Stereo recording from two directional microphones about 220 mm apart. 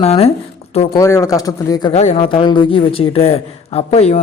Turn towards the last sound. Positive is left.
turn(degrees=30)  # may be behind; listen again after turning